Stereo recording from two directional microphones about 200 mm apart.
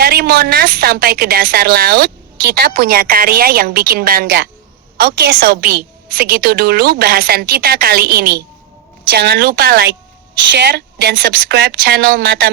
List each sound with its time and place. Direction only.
0.0 s a woman's voice: 50° right (ahead or behind)
10.5 s a woman's voice: 60° right (ahead or behind)